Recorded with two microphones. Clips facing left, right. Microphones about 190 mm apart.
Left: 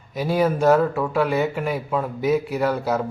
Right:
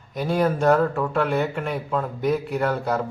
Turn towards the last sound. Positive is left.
turn(degrees=5)  # may be behind; listen again after turning